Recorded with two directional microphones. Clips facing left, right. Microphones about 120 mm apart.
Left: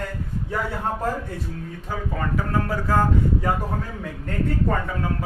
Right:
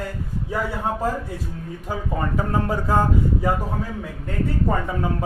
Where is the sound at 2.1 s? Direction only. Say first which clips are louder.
Right 1 dB; 20° right (ahead or behind).